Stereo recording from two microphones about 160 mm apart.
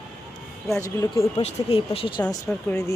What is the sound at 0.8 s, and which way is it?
Speech, 20° left (ahead or behind).